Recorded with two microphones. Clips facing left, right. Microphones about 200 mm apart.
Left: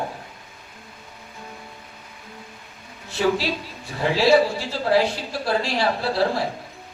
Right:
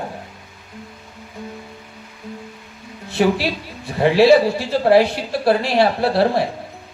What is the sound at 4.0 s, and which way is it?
Speech, 65° right (ahead or behind).